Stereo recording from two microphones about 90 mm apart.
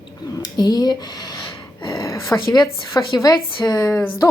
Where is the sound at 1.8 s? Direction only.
40° left (ahead or behind).